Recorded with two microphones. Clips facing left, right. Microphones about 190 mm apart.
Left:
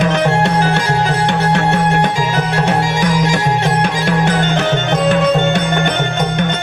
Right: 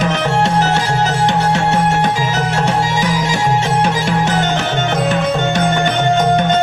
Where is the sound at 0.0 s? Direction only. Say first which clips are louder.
Left 2 dB; 55° left (ahead or behind).